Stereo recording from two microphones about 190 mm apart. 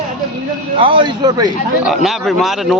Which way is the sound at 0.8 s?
25° right (ahead or behind).